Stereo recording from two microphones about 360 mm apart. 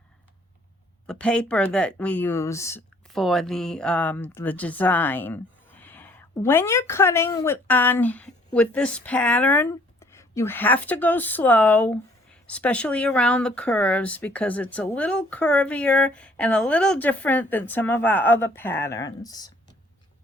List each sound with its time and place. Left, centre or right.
1.0 s speech: centre